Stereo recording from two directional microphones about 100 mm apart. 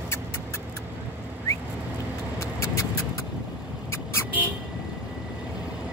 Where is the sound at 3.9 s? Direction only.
25° left (ahead or behind).